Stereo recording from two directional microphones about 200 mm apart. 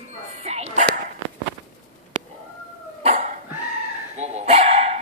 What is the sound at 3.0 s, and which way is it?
Cough, 35° right (ahead or behind).